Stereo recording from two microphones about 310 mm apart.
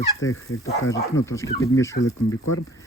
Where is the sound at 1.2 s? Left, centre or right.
Centre.